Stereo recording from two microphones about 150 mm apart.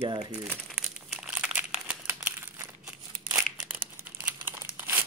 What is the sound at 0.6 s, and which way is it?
Crumpling, centre (ahead or behind).